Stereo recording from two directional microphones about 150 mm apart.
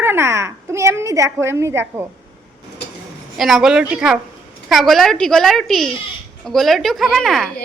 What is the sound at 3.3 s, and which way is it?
A woman's voice, centre (ahead or behind).